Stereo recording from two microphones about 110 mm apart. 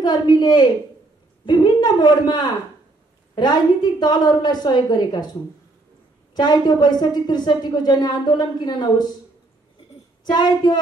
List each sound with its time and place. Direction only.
0.0 s a woman's voice: 40° left (ahead or behind)
6.3 s a woman's voice: 40° left (ahead or behind)
10.2 s a woman's voice: 40° left (ahead or behind)